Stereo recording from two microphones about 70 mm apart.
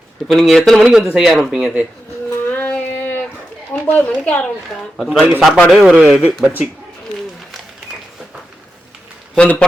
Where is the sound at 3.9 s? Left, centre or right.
Left.